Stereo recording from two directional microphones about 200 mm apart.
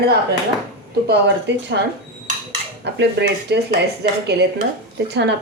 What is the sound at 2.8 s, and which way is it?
Speech, 60° right (ahead or behind).